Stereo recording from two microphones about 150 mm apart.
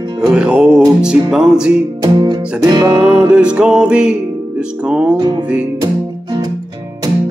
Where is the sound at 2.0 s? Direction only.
30° right (ahead or behind).